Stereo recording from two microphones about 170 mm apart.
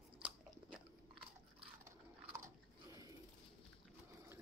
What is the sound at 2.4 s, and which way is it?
Biting, 20° right (ahead or behind).